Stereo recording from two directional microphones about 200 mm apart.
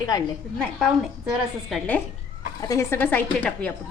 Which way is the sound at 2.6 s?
15° left (ahead or behind).